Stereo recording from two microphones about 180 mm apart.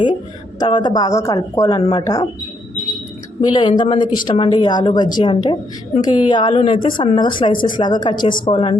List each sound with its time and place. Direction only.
0.6 s speech: 25° left (ahead or behind)
3.4 s speech: 25° left (ahead or behind)